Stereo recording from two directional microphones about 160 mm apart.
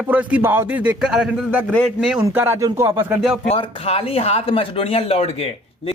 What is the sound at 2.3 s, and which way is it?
Speech, 15° right (ahead or behind).